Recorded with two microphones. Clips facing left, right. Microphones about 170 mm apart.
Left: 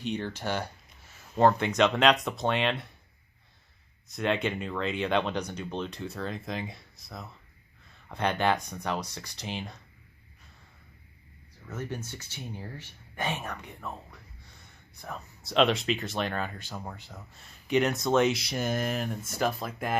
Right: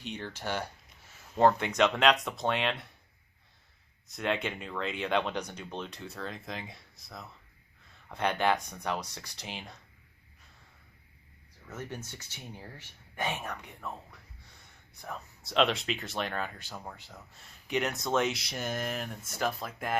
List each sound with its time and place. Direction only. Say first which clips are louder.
0.0 s speech: left 6 dB; 5° right (ahead or behind)
4.1 s speech: left 4 dB; 5° right (ahead or behind)
8.1 s speech: left 1 dB; 10° right (ahead or behind)
11.7 s speech: left 4 dB; 15° right (ahead or behind)
15.0 s speech: left 1 dB; 5° right (ahead or behind)
16.7 s speech: left 3 dB; 5° left (ahead or behind)
17.7 s speech: left 5 dB; 5° right (ahead or behind)